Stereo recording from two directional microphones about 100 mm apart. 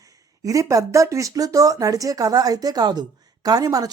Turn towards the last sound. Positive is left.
turn(degrees=-40)  # may be behind; listen again after turning